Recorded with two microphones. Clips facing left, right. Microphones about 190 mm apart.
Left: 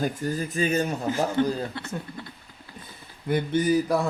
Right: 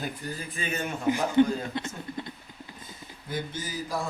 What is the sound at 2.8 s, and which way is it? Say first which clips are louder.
Speech: left 14 dB; 60° left (ahead or behind).